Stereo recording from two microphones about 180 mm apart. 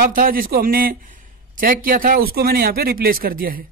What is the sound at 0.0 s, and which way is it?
A man's voice, 50° right (ahead or behind).